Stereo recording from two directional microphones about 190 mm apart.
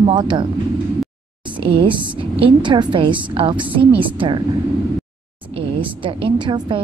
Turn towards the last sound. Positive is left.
turn(degrees=-25)  # may be behind; listen again after turning